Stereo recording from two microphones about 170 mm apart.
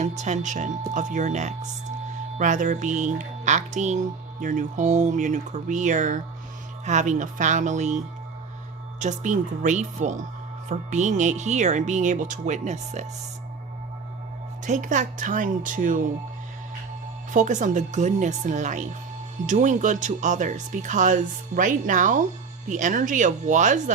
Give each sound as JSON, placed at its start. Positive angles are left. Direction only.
{"t": 0.0, "sound": "speech", "side_deg": -45}
{"t": 14.6, "sound": "speech", "side_deg": -50}
{"t": 17.3, "sound": "speech", "side_deg": -45}